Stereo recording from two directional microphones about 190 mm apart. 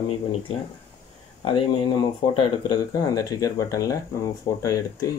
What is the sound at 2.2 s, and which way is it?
Speech, 20° left (ahead or behind).